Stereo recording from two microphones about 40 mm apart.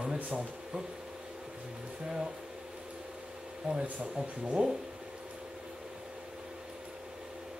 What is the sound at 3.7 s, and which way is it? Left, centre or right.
Speech, right.